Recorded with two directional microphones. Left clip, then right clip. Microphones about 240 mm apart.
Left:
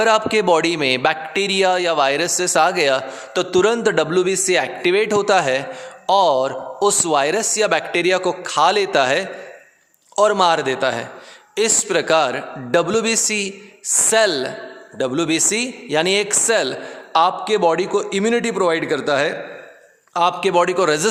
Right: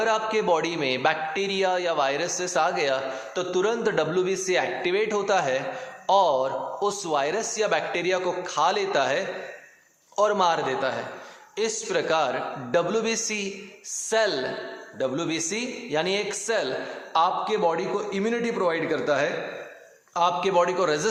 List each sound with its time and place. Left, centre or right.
0.0 s a man's voice: left